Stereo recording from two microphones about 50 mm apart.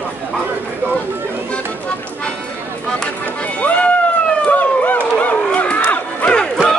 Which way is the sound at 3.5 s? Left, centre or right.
Left.